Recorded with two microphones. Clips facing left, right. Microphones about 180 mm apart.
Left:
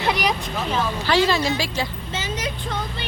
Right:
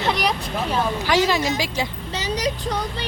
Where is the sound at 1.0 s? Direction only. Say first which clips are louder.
Left 1 dB; 15° right (ahead or behind).